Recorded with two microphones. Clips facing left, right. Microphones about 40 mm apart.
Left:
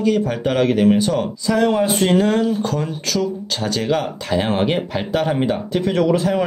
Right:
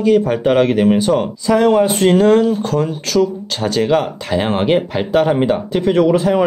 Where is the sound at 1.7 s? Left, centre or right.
Centre.